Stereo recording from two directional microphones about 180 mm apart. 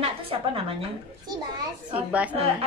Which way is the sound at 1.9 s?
10° right (ahead or behind).